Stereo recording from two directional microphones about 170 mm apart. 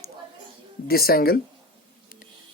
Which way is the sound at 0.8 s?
60° left (ahead or behind).